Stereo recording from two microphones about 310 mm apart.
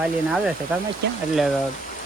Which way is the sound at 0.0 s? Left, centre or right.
Centre.